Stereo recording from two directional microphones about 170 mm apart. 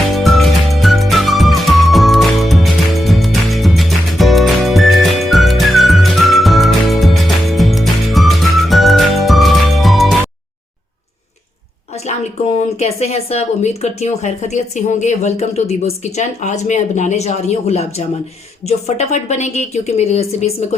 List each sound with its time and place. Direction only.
0.1 s music: centre (ahead or behind)
12.0 s speech: 40° left (ahead or behind)